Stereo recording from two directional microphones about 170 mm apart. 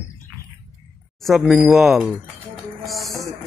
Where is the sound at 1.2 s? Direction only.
Centre (ahead or behind).